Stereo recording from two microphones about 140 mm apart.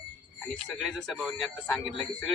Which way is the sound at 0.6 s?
Centre (ahead or behind).